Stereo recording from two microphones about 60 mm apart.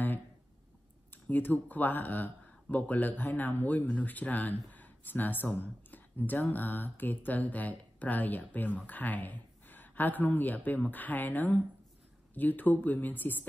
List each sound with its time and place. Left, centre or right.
1.1 s speech: left